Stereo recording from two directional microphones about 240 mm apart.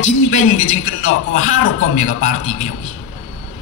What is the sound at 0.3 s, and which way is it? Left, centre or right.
A man's voice, left.